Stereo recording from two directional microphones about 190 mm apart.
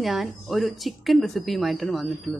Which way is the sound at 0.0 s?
Centre (ahead or behind).